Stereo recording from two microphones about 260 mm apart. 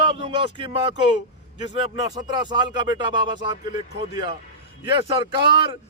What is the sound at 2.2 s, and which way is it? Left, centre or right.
A man's voice, centre.